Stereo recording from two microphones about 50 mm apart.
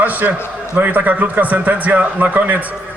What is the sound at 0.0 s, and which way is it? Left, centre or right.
A man's voice, right.